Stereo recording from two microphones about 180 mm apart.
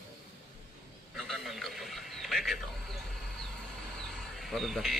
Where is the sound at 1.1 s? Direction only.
Centre (ahead or behind).